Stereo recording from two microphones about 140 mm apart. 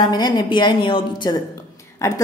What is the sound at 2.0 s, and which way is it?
Speech, 20° left (ahead or behind).